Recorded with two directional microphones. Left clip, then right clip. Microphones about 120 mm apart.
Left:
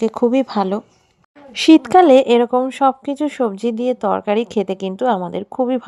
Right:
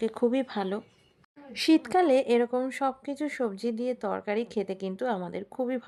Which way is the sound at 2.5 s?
30° left (ahead or behind).